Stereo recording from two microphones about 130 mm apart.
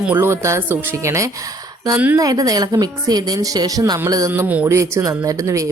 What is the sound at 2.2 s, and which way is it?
A woman's voice, 30° right (ahead or behind).